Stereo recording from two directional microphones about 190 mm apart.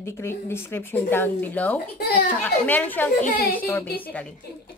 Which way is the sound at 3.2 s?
50° left (ahead or behind).